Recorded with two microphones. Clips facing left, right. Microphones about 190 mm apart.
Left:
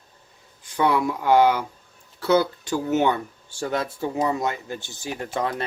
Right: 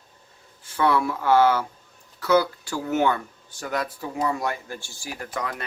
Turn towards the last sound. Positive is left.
turn(degrees=30)  # may be behind; listen again after turning